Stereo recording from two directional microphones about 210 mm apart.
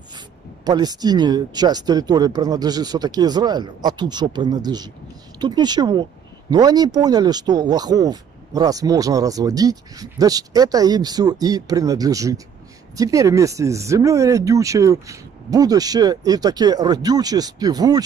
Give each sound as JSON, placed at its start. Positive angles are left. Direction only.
{"t": 0.7, "sound": "speech", "side_deg": -20}